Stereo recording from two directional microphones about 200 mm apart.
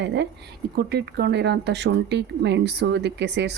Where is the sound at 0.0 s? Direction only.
60° right (ahead or behind).